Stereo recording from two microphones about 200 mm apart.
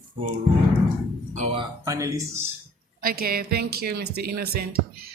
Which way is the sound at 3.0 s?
45° right (ahead or behind).